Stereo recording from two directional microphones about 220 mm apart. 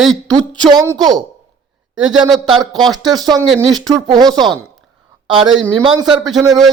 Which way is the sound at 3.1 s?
20° right (ahead or behind).